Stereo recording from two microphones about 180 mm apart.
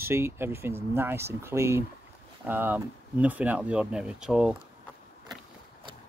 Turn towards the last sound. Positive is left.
turn(degrees=-5)  # may be behind; listen again after turning